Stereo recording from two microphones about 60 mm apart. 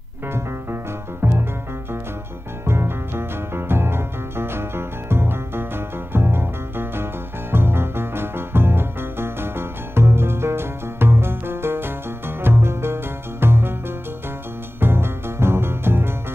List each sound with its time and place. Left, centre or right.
1.2 s music: right
2.6 s music: right